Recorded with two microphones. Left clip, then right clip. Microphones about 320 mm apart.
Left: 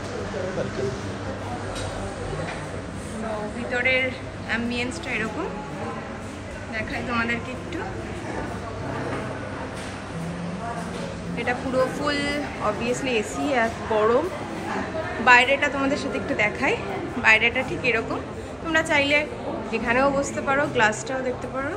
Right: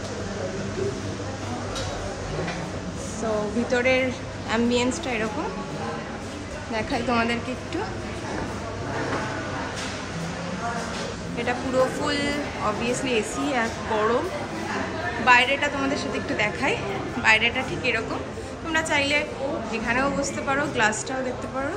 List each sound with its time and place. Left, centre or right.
3.7 s a woman's voice: centre
6.7 s a woman's voice: centre
12.0 s speech: centre
15.2 s speech: centre